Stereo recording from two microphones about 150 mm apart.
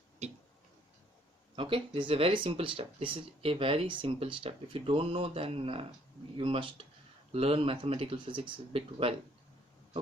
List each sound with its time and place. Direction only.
0.2 s tick-tock: 50° right (ahead or behind)
1.5 s speech: 35° right (ahead or behind)